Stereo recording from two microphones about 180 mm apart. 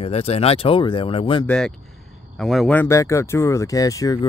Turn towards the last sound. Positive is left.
turn(degrees=20)  # may be behind; listen again after turning